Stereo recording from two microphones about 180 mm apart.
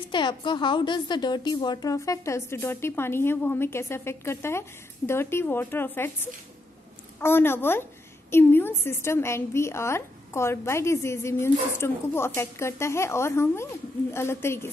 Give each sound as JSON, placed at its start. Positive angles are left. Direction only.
{"t": 0.1, "sound": "a woman's voice", "side_deg": 25}
{"t": 7.2, "sound": "a woman's voice", "side_deg": 15}